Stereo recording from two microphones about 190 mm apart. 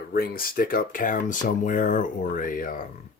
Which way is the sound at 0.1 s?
50° left (ahead or behind).